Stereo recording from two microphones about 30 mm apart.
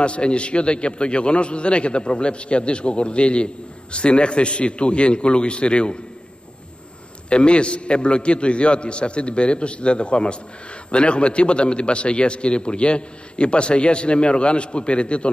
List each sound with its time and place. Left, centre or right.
0.0 s a man's voice: left
7.2 s a man's voice: left